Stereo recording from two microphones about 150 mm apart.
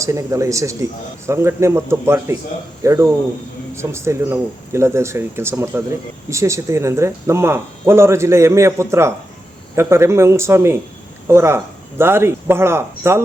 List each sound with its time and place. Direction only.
0.0 s speech: 20° right (ahead or behind)